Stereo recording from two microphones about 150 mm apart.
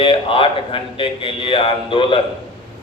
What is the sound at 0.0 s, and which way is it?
A man's voice, 35° left (ahead or behind).